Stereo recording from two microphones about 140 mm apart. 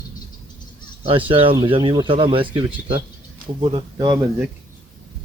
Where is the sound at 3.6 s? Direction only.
35° right (ahead or behind).